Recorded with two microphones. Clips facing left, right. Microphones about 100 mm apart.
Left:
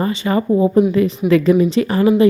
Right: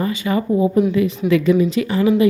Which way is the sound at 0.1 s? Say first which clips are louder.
Left 2 dB; 35° left (ahead or behind).